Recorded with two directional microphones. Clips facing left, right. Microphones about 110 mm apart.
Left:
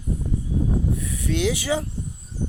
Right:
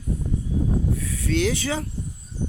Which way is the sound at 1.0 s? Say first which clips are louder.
Right 1 dB; 20° left (ahead or behind).